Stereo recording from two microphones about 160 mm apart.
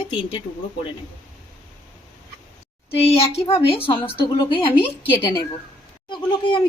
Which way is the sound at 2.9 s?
35° left (ahead or behind).